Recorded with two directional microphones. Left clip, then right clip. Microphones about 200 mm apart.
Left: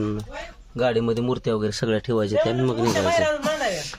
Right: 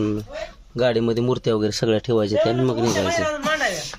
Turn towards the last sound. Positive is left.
turn(degrees=5)  # may be behind; listen again after turning